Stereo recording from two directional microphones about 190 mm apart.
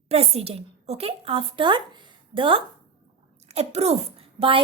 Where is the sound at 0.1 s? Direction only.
30° right (ahead or behind).